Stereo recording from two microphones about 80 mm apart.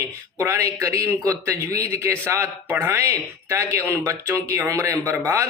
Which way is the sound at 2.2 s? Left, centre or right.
Right.